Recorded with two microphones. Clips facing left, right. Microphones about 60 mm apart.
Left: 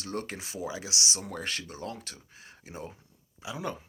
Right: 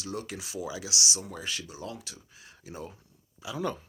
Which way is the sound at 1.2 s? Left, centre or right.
Left.